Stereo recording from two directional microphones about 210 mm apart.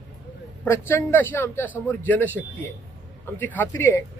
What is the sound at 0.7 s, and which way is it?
A man's voice, 10° left (ahead or behind).